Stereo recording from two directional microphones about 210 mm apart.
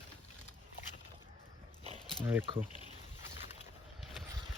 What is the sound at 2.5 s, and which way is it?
Speech, 20° right (ahead or behind).